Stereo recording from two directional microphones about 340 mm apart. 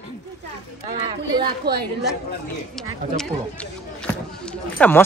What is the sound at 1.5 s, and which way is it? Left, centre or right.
Speech, right.